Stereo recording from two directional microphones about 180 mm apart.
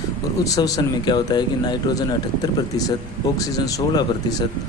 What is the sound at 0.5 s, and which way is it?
Speech, 20° left (ahead or behind).